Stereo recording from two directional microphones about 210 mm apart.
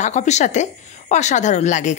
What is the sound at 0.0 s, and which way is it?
A woman's voice, 35° left (ahead or behind).